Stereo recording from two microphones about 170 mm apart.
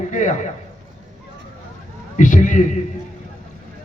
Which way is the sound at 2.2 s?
50° left (ahead or behind).